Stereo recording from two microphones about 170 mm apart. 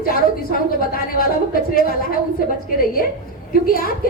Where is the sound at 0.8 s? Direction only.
55° left (ahead or behind).